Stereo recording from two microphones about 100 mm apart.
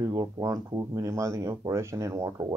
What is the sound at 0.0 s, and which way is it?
Speech, 35° right (ahead or behind).